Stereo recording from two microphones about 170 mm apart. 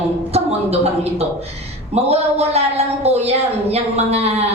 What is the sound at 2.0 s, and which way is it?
Speech, 35° right (ahead or behind).